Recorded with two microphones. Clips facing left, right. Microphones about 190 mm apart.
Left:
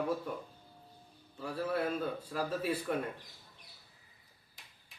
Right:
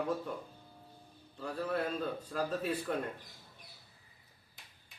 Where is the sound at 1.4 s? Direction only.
5° left (ahead or behind).